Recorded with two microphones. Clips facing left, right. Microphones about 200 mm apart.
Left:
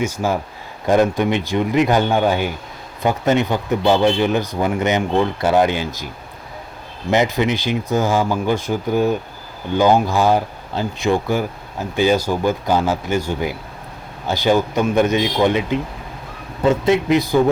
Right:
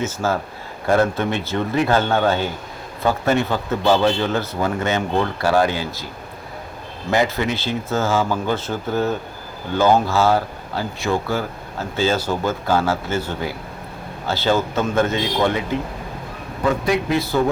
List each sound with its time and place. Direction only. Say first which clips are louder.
0.0 s speech: left 2 dB; 15° left (ahead or behind)
7.1 s speech: left 3 dB; 20° left (ahead or behind)